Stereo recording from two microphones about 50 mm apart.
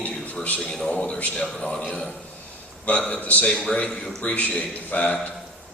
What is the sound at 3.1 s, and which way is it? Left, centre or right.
Speech, left.